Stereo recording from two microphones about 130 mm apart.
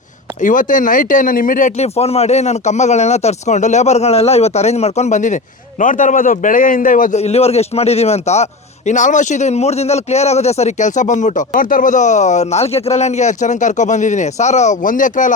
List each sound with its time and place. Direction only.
0.4 s speech: 90° left
2.0 s speech: 55° left (ahead or behind); by 5.4 s 70° left (ahead or behind)
5.8 s speech: 85° left
7.2 s a man's voice: 55° left (ahead or behind)
8.9 s a man's voice: 75° left (ahead or behind)